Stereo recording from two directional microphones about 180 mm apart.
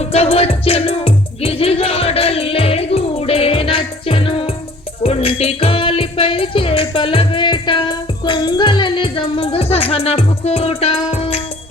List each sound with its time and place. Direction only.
0.0 s music: 35° left (ahead or behind)